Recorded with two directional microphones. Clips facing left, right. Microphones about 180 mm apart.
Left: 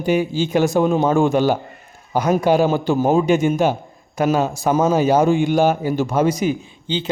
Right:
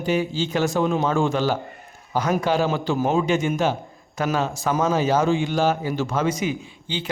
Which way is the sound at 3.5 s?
10° left (ahead or behind).